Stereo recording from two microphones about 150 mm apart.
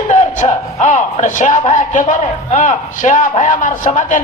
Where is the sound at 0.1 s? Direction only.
50° left (ahead or behind).